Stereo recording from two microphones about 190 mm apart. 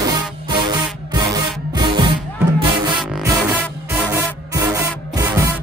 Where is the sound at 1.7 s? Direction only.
25° right (ahead or behind).